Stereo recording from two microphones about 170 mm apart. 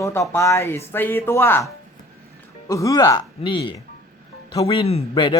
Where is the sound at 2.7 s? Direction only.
20° left (ahead or behind).